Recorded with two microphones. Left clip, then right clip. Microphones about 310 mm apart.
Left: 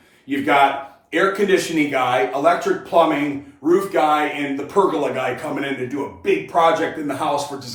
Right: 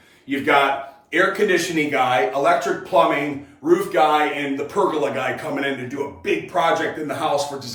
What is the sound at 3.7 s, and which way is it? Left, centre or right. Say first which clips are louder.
Speech: even; centre.